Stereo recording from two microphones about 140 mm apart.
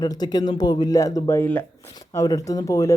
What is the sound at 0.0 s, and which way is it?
Speech, 30° left (ahead or behind).